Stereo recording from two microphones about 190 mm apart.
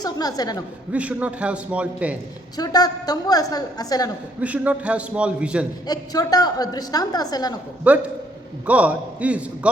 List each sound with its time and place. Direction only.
0.0 s a woman's voice: 20° left (ahead or behind)
0.9 s a man's voice: 5° right (ahead or behind)
2.6 s a woman's voice: 20° left (ahead or behind)
4.4 s a man's voice: 5° right (ahead or behind)
5.9 s a woman's voice: 20° left (ahead or behind)
7.9 s a man's voice: 5° right (ahead or behind)